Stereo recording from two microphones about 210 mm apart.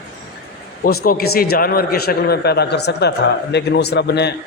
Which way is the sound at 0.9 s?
45° left (ahead or behind).